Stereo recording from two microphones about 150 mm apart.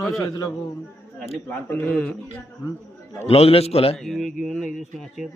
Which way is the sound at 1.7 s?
10° left (ahead or behind).